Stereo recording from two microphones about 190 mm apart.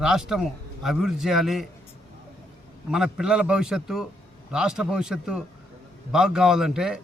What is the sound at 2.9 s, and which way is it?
A man's voice, 5° right (ahead or behind).